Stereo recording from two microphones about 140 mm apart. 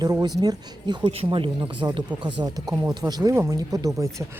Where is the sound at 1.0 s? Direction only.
45° right (ahead or behind); by 4.0 s 25° right (ahead or behind).